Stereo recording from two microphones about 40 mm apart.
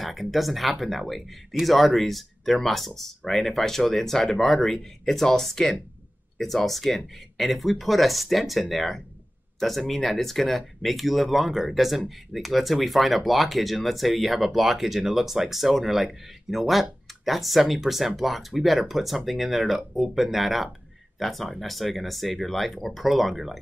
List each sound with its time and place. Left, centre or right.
0.0 s speech: centre